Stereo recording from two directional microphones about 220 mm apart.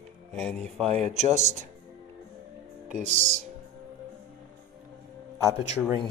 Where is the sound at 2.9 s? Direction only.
35° right (ahead or behind).